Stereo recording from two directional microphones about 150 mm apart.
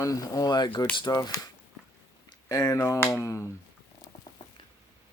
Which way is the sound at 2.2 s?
25° left (ahead or behind).